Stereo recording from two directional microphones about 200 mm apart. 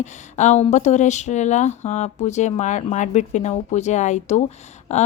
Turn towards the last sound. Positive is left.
turn(degrees=35)  # may be behind; listen again after turning